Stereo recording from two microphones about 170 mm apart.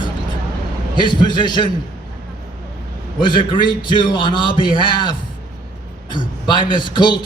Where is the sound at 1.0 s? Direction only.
25° left (ahead or behind).